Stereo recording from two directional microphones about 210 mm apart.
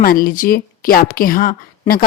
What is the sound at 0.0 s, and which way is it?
A woman's voice, 40° left (ahead or behind).